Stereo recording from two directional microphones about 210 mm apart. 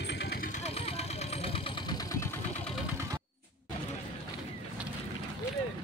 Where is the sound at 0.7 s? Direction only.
30° left (ahead or behind).